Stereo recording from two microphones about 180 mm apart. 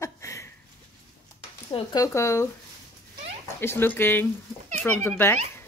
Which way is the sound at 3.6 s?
10° left (ahead or behind).